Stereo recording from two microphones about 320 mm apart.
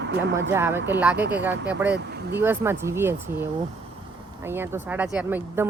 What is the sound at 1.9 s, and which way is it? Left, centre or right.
Speech, right.